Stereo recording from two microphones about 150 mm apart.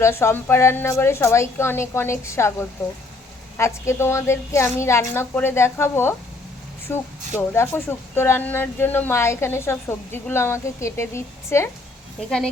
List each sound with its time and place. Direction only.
0.0 s a woman's voice: 20° left (ahead or behind)